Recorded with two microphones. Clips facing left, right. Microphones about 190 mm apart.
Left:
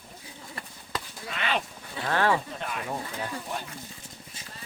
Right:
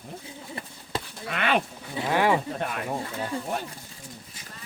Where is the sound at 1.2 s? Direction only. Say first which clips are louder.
Right 5 dB; 60° right (ahead or behind).